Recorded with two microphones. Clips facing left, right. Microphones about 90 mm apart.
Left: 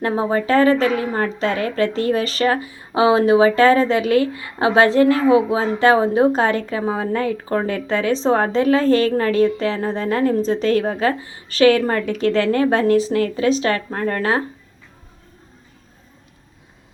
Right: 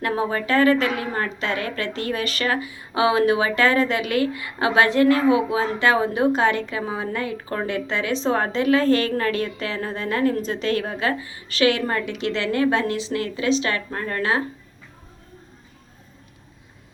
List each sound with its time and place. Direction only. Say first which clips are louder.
0.0 s a woman's voice: left 4 dB; 30° left (ahead or behind)